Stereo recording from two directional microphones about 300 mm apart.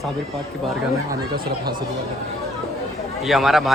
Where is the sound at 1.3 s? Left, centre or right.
Right.